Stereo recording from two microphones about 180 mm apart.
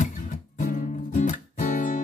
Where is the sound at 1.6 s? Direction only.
45° left (ahead or behind).